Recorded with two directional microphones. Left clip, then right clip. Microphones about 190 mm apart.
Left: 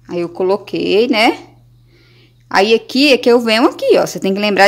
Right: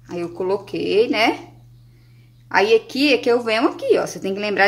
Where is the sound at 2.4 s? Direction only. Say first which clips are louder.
Left 4 dB; 50° left (ahead or behind).